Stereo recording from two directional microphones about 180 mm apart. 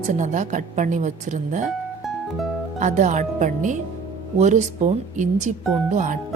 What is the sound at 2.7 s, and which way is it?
Speech, 40° right (ahead or behind).